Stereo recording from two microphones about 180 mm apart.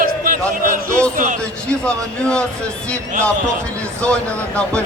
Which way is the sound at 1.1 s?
45° right (ahead or behind).